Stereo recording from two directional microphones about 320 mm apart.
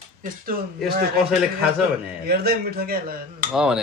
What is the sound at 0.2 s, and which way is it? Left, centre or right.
Speech, right.